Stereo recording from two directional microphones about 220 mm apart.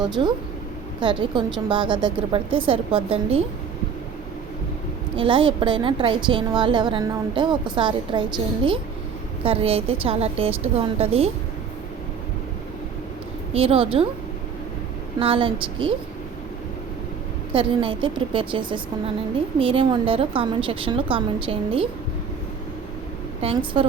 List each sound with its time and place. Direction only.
0.2 s a woman's voice: 20° right (ahead or behind)
5.1 s a woman's voice: 20° right (ahead or behind)
9.4 s a woman's voice: 25° right (ahead or behind)
13.5 s a woman's voice: 25° right (ahead or behind)
15.2 s a woman's voice: 25° right (ahead or behind)
17.5 s a woman's voice: 25° right (ahead or behind)
23.4 s a woman's voice: 25° right (ahead or behind)